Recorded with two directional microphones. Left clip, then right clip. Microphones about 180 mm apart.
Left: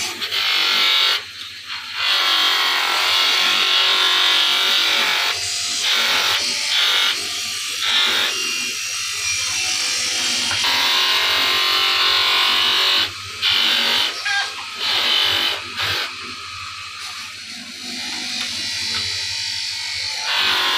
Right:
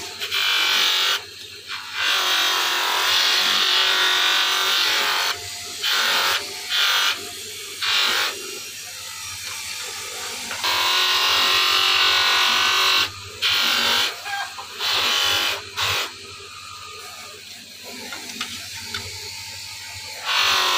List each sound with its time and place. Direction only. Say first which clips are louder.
0.3 s electric shaver: left 1 dB; 25° right (ahead or behind)
2.0 s music: left 3 dB; 25° right (ahead or behind)
7.8 s electric shaver: left 2 dB; 20° right (ahead or behind)
10.7 s electric shaver: even; 30° right (ahead or behind)
20.3 s music: even; 30° right (ahead or behind)